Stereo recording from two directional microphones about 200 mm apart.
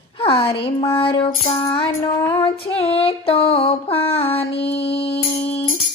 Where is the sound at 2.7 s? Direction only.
30° left (ahead or behind).